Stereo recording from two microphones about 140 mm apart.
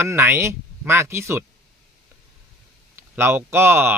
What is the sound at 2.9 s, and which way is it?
Speech, 15° right (ahead or behind).